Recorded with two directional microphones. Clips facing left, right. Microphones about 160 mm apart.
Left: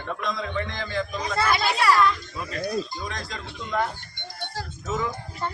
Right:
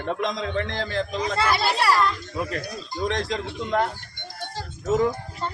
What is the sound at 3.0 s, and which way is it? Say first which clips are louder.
Speech: right 9 dB; 75° right (ahead or behind).